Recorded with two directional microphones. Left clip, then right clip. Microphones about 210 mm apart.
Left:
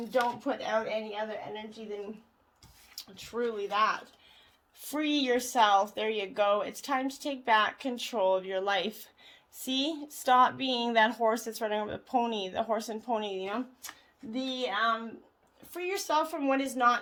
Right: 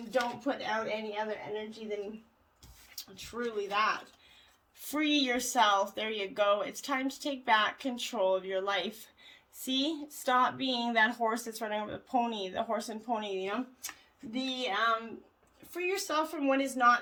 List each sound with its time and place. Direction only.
0.1 s speech: 35° left (ahead or behind)
3.0 s speech: 30° left (ahead or behind)